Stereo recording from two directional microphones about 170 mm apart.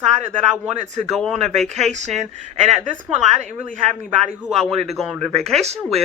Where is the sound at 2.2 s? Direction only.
40° right (ahead or behind).